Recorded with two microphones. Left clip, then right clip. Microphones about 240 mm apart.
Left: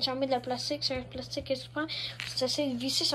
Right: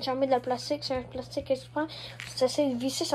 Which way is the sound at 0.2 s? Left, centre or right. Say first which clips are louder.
Right 4 dB; centre.